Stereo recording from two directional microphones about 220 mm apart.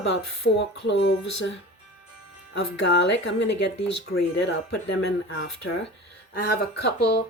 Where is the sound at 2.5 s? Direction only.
50° left (ahead or behind).